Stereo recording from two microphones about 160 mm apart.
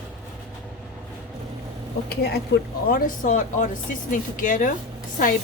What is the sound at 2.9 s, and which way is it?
Speech, 60° left (ahead or behind).